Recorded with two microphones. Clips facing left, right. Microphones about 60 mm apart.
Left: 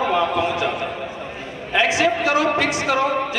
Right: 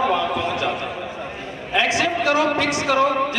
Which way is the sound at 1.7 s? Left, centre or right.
Left.